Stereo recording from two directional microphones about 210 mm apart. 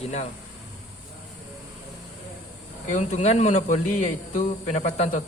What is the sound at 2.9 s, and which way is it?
Speech, 35° left (ahead or behind).